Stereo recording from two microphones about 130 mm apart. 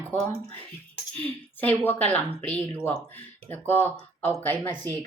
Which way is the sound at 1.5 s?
15° left (ahead or behind).